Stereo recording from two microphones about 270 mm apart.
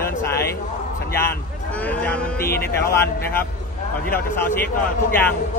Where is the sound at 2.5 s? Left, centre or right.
Left.